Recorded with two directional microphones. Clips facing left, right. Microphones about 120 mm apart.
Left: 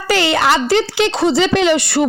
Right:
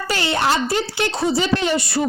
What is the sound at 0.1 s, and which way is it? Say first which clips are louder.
A woman's voice: left 6 dB; 90° left.